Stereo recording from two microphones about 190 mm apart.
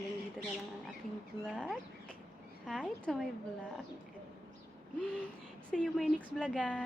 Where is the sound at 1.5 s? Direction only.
Centre (ahead or behind).